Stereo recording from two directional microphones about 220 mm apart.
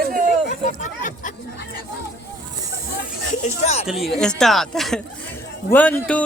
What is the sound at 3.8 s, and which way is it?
Speech, centre (ahead or behind).